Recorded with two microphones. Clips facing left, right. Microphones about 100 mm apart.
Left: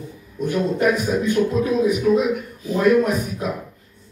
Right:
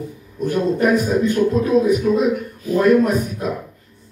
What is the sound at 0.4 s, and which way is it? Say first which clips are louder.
A man's voice: right 2 dB; 40° right (ahead or behind).